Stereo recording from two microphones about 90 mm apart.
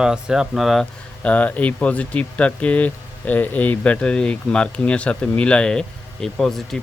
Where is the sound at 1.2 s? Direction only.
15° left (ahead or behind).